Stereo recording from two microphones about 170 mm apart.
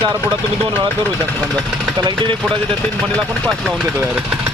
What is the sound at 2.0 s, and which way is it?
Speech, 25° right (ahead or behind).